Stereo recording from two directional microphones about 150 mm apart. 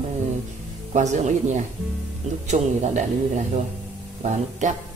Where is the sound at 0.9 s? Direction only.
50° right (ahead or behind).